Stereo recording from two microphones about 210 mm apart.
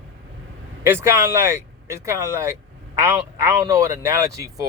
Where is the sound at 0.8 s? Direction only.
10° right (ahead or behind).